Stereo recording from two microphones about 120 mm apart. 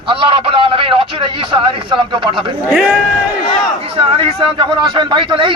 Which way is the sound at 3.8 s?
50° right (ahead or behind).